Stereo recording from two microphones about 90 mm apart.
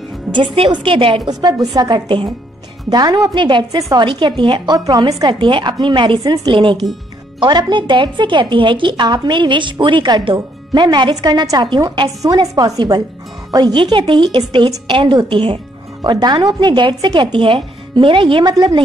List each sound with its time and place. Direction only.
0.3 s a woman's voice: 65° right (ahead or behind); by 1.3 s 85° right
1.4 s a woman's voice: 50° right (ahead or behind)
3.3 s speech: 60° right (ahead or behind)
4.6 s a woman's voice: 45° right (ahead or behind)
5.4 s speech: 60° right (ahead or behind)
6.2 s a woman's voice: 45° right (ahead or behind)
6.5 s a woman's voice: 65° right (ahead or behind)
11.1 s a woman's voice: 45° right (ahead or behind)
12.3 s a woman's voice: 40° right (ahead or behind)
13.7 s speech: 65° right (ahead or behind)
18.4 s a woman's voice: 45° right (ahead or behind)